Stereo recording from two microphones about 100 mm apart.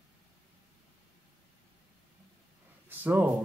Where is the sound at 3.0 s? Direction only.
20° right (ahead or behind).